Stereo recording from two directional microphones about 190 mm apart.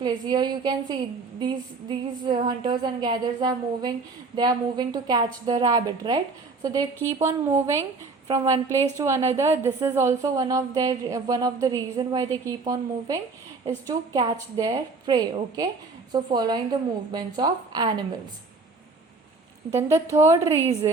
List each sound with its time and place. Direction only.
0.0 s a woman's voice: 25° right (ahead or behind)
19.7 s a woman's voice: 15° right (ahead or behind)